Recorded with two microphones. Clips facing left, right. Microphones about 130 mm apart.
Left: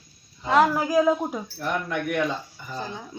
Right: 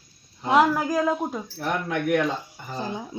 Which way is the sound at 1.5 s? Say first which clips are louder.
Right 2 dB; 90° right.